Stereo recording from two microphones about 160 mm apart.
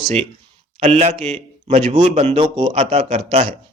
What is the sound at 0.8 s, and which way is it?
Speech, 45° right (ahead or behind).